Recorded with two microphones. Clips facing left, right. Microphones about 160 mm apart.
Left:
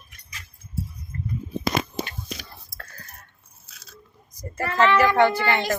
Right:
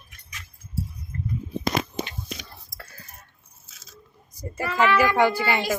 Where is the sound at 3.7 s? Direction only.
65° left (ahead or behind).